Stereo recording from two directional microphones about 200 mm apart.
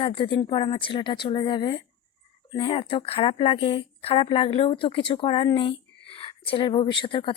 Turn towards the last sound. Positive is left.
turn(degrees=25)  # may be behind; listen again after turning